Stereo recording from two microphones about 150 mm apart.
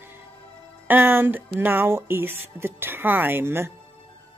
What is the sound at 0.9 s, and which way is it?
Speech, 15° right (ahead or behind).